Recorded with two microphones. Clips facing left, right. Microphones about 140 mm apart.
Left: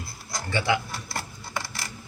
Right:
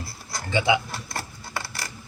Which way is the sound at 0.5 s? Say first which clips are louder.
Right 3 dB; 15° right (ahead or behind).